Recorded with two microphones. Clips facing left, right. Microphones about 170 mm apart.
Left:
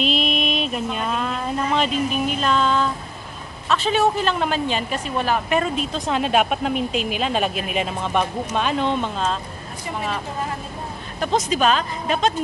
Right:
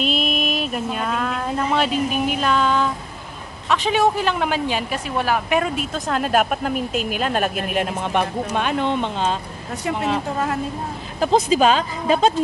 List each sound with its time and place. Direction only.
0.1 s a sound: 5° right (ahead or behind)
1.2 s speech: 5° right (ahead or behind)
6.9 s speech: 50° right (ahead or behind)
7.2 s speech: 5° right (ahead or behind)
11.1 s speech: 30° right (ahead or behind)